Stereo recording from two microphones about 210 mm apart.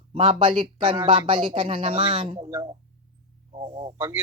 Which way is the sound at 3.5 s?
25° right (ahead or behind).